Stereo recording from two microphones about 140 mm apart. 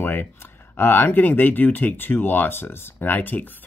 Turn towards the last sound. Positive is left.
turn(degrees=15)  # may be behind; listen again after turning